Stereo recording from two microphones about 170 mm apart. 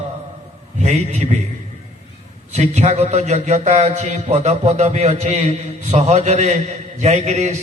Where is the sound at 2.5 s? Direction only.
45° right (ahead or behind).